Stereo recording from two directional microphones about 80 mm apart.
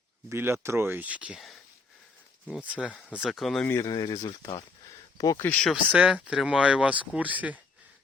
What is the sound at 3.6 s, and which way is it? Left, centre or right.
Speech, left.